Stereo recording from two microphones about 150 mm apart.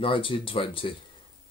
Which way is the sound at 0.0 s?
35° left (ahead or behind).